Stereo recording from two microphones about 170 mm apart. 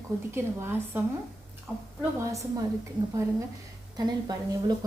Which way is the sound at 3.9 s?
25° right (ahead or behind).